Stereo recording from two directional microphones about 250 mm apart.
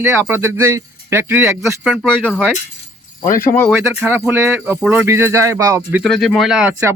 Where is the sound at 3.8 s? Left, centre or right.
Centre.